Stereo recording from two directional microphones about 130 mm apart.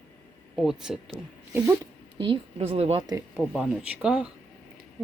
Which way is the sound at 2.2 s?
40° right (ahead or behind).